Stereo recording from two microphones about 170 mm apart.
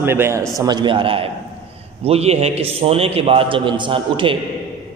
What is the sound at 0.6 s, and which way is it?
A man's voice, 25° right (ahead or behind).